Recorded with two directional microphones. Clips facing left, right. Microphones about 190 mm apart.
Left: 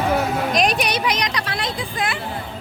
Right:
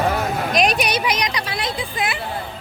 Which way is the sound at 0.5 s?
5° right (ahead or behind).